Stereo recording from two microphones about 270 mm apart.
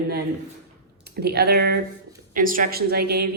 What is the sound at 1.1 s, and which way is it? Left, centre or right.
A woman's voice, right.